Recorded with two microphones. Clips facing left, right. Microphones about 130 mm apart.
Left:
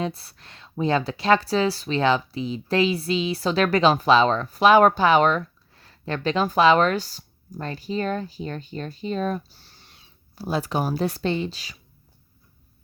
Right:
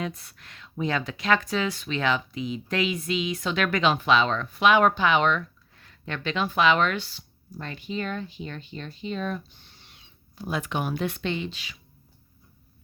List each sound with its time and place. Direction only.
0.0 s speech: 30° left (ahead or behind)